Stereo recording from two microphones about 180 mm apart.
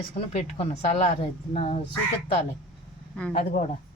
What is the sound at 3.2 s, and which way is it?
Speech, 5° left (ahead or behind).